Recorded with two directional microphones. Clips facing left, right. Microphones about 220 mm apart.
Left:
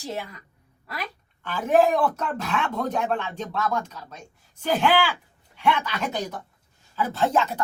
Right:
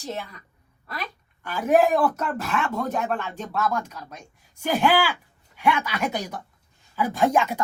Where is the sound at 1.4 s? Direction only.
10° right (ahead or behind).